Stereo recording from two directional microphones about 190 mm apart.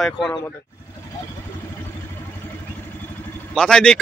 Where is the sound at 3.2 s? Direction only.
5° left (ahead or behind).